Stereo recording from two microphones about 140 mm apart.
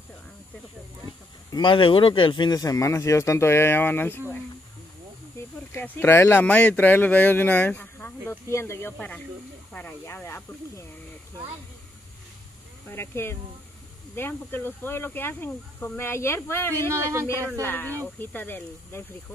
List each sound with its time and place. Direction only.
1.5 s speech: 35° left (ahead or behind); by 4.2 s 15° left (ahead or behind)
5.7 s speech: 15° left (ahead or behind)
12.9 s speech: 15° left (ahead or behind)
16.9 s speech: 20° right (ahead or behind)
17.3 s speech: 15° left (ahead or behind)